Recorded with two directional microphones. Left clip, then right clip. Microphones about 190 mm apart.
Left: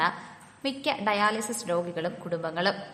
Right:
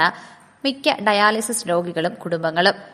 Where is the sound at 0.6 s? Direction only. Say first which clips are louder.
Right 9 dB; 35° right (ahead or behind).